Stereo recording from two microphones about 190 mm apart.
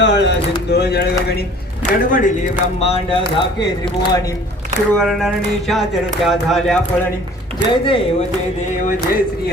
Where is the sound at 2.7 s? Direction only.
30° left (ahead or behind).